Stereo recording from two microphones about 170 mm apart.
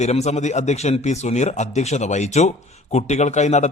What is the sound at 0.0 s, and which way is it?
A man's voice, 40° left (ahead or behind).